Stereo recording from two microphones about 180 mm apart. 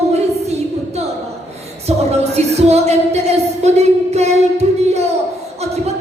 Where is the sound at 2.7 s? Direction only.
35° right (ahead or behind).